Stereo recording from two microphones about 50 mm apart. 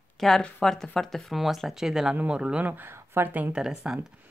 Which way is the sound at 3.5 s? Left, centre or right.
Centre.